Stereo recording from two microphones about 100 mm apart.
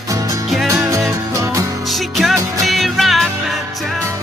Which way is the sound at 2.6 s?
Centre (ahead or behind).